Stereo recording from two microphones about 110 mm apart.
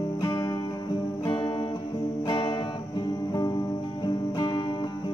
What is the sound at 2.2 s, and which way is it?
Music, 45° left (ahead or behind).